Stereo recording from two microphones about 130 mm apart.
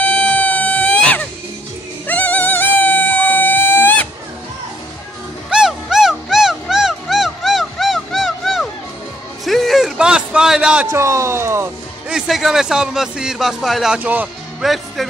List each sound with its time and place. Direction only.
0.1 s wail: 10° left (ahead or behind)
2.0 s music: 10° left (ahead or behind)
5.5 s music: 5° right (ahead or behind)
10.9 s speech: 20° right (ahead or behind)
12.1 s a man's voice: 5° right (ahead or behind)
14.6 s a man's voice: centre (ahead or behind)